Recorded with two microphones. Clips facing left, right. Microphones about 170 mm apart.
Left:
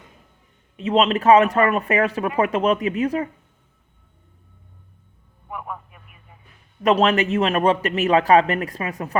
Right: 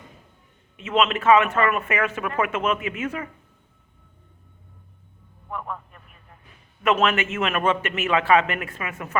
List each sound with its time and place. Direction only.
0.8 s a man's voice: 35° left (ahead or behind)
5.5 s a sound: 10° left (ahead or behind)
6.8 s a man's voice: 35° left (ahead or behind)